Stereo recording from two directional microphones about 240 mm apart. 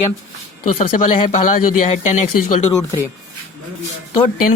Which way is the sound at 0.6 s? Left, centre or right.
Left.